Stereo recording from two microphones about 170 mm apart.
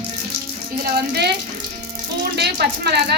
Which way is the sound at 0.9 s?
75° right (ahead or behind).